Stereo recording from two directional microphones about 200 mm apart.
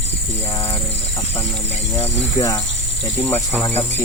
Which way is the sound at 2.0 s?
20° left (ahead or behind).